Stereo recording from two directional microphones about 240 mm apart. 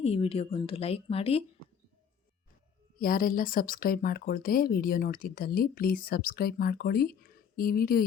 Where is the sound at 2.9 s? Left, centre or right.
Left.